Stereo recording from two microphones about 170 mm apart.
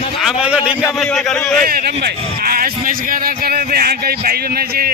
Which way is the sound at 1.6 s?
60° right (ahead or behind).